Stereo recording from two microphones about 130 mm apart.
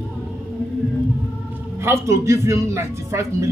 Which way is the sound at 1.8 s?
20° right (ahead or behind).